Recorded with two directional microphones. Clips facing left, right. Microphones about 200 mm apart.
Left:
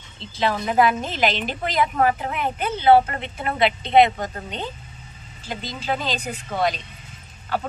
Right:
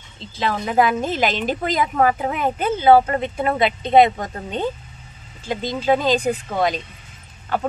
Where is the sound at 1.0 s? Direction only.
45° right (ahead or behind).